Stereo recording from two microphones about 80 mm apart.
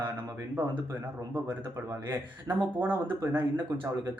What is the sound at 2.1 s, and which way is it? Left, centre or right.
Speech, right.